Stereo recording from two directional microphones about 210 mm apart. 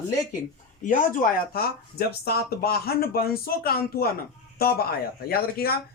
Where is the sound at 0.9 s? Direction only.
45° left (ahead or behind).